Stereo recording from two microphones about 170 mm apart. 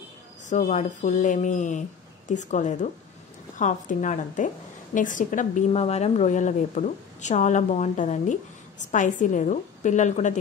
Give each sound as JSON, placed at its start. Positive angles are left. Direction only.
{"t": 0.5, "sound": "a woman's voice", "side_deg": 45}